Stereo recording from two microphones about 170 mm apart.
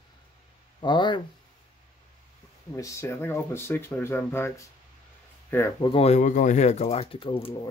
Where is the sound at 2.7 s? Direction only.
20° left (ahead or behind).